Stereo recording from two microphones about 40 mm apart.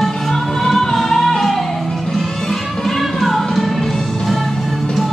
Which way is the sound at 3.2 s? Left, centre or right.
Centre.